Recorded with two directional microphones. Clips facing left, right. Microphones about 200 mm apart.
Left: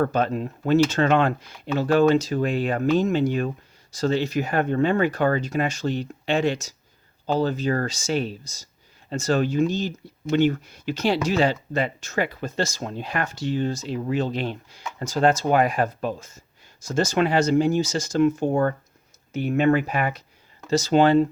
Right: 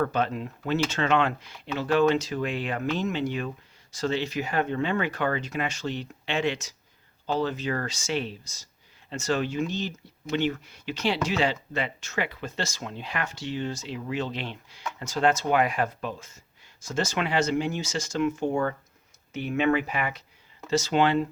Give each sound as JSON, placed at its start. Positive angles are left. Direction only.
{"t": 0.0, "sound": "speech", "side_deg": 40}